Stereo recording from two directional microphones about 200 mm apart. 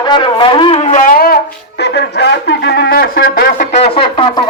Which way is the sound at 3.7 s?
30° left (ahead or behind).